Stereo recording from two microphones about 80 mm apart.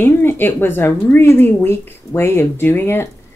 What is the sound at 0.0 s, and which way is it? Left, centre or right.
A woman's voice, left.